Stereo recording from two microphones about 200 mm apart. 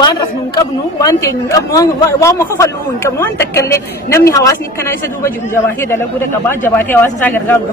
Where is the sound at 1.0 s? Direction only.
15° left (ahead or behind).